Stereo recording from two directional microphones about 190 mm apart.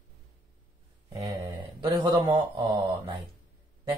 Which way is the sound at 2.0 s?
25° right (ahead or behind).